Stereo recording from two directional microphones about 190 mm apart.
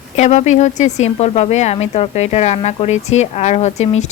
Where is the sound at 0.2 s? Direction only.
35° left (ahead or behind).